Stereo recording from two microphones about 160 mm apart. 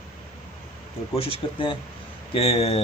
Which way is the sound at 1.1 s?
35° left (ahead or behind).